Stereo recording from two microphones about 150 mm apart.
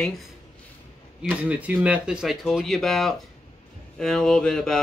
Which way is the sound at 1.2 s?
10° right (ahead or behind).